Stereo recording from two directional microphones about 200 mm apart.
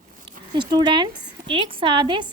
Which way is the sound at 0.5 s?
20° right (ahead or behind).